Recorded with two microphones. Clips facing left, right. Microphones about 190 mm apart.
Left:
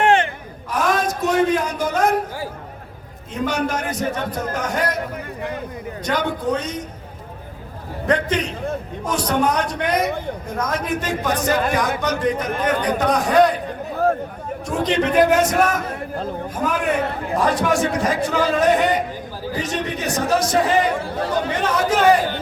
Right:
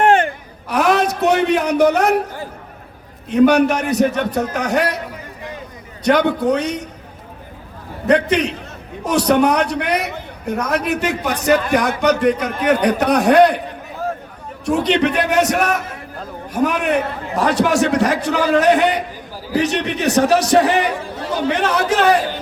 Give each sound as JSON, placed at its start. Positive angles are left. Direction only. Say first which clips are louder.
{"t": 0.7, "sound": "a sound", "louder": "right 4 dB", "side_deg": -70}
{"t": 3.3, "sound": "a man's voice", "louder": "right 10 dB", "side_deg": -70}
{"t": 6.1, "sound": "a man's voice", "louder": "right 7 dB", "side_deg": -70}
{"t": 8.1, "sound": "a man's voice", "louder": "right 5 dB", "side_deg": -70}
{"t": 14.6, "sound": "a man's voice", "louder": "right 4 dB", "side_deg": -70}